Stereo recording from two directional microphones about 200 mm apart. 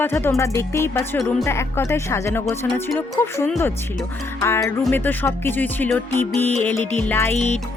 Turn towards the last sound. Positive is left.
turn(degrees=10)  # may be behind; listen again after turning